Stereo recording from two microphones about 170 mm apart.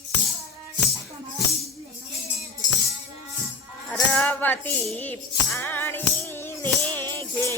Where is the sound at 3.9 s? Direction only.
10° left (ahead or behind).